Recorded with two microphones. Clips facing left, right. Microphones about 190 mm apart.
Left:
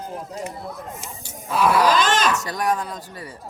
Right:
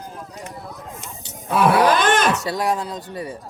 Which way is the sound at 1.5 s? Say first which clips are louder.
Right 2 dB; 60° right (ahead or behind).